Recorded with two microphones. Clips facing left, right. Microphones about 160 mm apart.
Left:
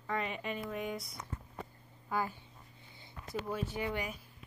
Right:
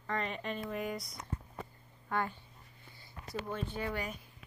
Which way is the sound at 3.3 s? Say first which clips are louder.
Left 1 dB; 5° left (ahead or behind).